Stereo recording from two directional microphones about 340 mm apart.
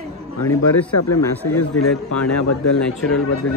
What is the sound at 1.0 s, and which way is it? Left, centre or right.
A man's voice, left.